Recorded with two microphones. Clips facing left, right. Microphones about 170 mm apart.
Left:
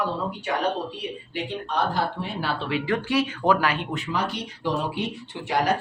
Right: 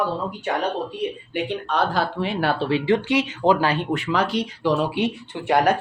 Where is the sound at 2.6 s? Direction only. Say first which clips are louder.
Right 5 dB; 30° right (ahead or behind).